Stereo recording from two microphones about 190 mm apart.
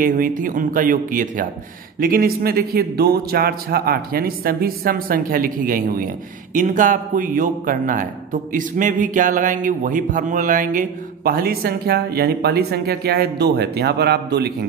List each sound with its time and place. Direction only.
0.0 s a man's voice: 45° right (ahead or behind)